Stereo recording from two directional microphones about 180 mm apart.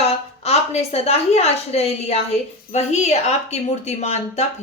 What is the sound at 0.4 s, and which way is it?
A woman's voice, 35° left (ahead or behind).